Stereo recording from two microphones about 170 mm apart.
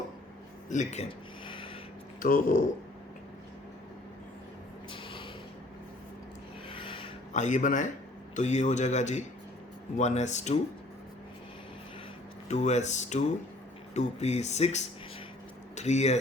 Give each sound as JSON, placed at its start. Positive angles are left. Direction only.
{"t": 0.7, "sound": "speech", "side_deg": 45}
{"t": 1.5, "sound": "a sound", "side_deg": 30}
{"t": 2.2, "sound": "speech", "side_deg": 55}
{"t": 4.9, "sound": "a sound", "side_deg": 30}
{"t": 6.7, "sound": "rub", "side_deg": 30}
{"t": 7.3, "sound": "speech", "side_deg": 45}
{"t": 12.5, "sound": "speech", "side_deg": 40}